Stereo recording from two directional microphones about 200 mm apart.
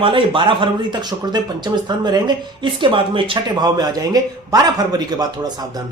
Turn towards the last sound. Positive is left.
turn(degrees=-20)  # may be behind; listen again after turning